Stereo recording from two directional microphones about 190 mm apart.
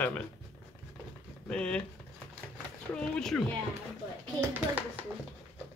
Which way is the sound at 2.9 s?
5° left (ahead or behind).